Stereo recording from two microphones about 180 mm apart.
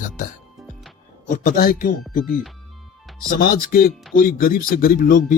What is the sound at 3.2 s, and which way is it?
Speech, 55° left (ahead or behind).